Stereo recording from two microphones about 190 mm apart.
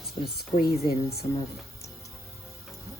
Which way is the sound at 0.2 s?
45° left (ahead or behind).